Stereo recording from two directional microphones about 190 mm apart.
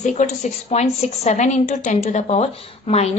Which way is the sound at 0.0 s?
40° left (ahead or behind).